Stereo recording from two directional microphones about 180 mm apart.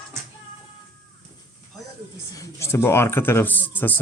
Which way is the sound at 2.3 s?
15° left (ahead or behind).